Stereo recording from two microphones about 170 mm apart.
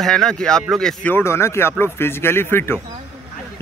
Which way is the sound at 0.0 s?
5° left (ahead or behind).